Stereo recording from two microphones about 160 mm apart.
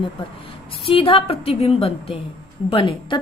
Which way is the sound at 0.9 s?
35° left (ahead or behind).